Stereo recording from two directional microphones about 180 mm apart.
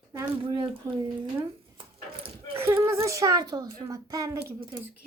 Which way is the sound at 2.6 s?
10° right (ahead or behind).